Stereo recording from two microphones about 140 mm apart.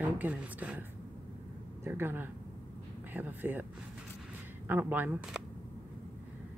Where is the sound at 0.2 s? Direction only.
10° right (ahead or behind).